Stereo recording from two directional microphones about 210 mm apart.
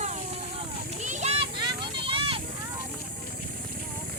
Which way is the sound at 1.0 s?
35° right (ahead or behind).